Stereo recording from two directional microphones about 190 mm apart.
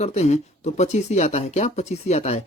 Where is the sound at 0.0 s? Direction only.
35° left (ahead or behind).